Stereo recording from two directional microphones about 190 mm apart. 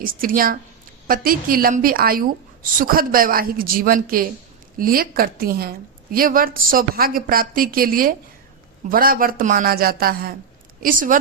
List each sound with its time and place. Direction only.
0.0 s a woman's voice: 50° right (ahead or behind)